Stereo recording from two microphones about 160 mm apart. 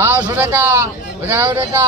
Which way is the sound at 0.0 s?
15° right (ahead or behind).